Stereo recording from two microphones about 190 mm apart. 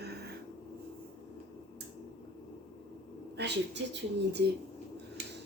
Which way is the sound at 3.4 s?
65° right (ahead or behind).